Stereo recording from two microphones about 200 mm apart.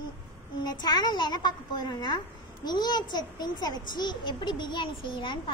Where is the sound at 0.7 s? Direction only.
20° left (ahead or behind).